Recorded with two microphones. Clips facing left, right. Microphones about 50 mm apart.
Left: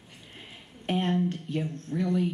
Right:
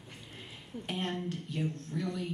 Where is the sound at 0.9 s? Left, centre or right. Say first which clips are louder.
Left 9 dB; left.